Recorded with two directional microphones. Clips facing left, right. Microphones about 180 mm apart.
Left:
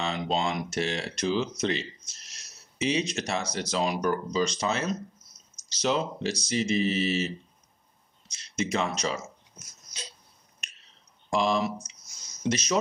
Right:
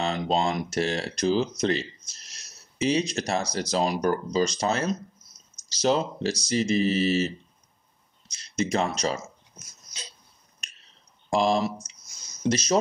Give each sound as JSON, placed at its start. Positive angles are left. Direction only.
{"t": 0.0, "sound": "speech", "side_deg": -40}
{"t": 11.3, "sound": "speech", "side_deg": -35}